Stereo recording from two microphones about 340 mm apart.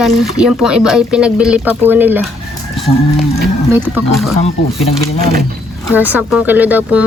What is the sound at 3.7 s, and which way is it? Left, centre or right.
Speech, centre.